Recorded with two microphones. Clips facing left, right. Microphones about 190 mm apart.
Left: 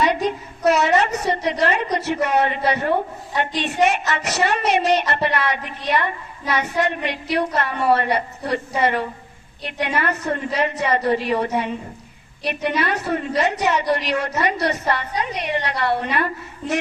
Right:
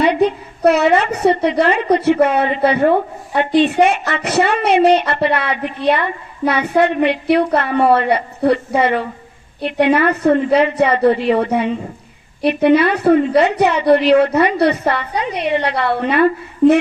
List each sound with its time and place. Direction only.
0.2 s a woman's voice: 60° right (ahead or behind)